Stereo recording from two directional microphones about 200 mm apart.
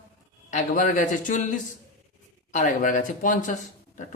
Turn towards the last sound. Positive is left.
turn(degrees=40)  # may be behind; listen again after turning